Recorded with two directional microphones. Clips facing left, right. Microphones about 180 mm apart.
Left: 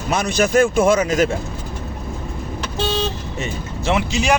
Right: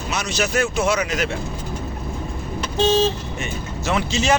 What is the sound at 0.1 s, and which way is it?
Speech, 50° left (ahead or behind).